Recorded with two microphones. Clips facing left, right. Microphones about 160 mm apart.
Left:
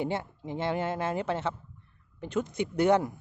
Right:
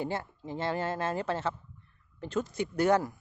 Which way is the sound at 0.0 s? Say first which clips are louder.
Left 2 dB; 20° left (ahead or behind).